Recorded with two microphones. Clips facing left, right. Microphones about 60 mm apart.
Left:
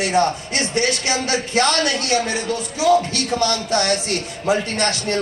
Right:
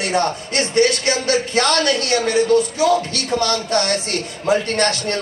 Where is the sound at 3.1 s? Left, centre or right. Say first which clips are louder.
Right 1 dB; right.